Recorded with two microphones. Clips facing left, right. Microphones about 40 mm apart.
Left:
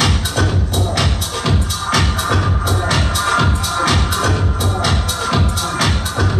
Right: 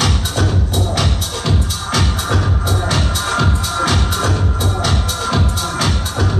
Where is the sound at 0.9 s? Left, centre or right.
Centre.